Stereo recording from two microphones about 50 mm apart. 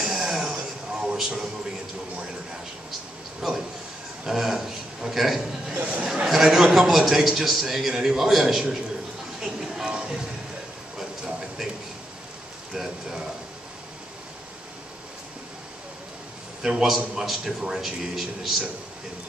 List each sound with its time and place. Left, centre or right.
0.0 s music: centre
3.4 s speech: centre
4.3 s a sound: centre
6.2 s a man's voice: centre
9.4 s music: centre
11.0 s a sound: centre
12.7 s a man's voice: centre
16.6 s a man's voice: centre